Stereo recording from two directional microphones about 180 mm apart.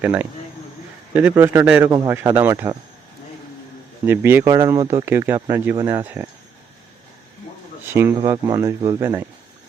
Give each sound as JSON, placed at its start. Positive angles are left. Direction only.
{"t": 0.0, "sound": "a man's voice", "side_deg": -10}
{"t": 4.0, "sound": "a man's voice", "side_deg": -10}
{"t": 7.9, "sound": "a man's voice", "side_deg": -10}